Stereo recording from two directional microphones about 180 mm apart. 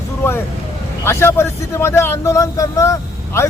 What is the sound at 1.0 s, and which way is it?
Speech, 15° left (ahead or behind).